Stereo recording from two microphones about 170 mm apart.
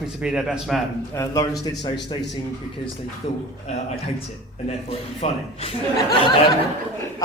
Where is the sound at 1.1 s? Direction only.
20° left (ahead or behind).